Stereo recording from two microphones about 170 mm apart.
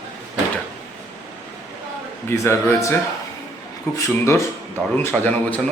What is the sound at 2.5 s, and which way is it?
A man's voice, 15° left (ahead or behind).